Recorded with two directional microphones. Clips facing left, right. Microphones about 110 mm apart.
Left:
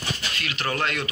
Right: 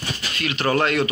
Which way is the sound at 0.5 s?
45° right (ahead or behind).